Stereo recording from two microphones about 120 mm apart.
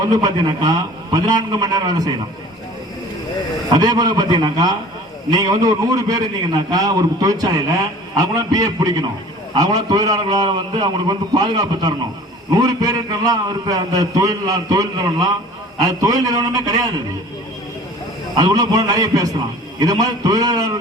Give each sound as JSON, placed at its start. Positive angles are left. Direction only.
{"t": 0.1, "sound": "a man's voice", "side_deg": -35}
{"t": 3.7, "sound": "a man's voice", "side_deg": -35}
{"t": 18.3, "sound": "a man's voice", "side_deg": -30}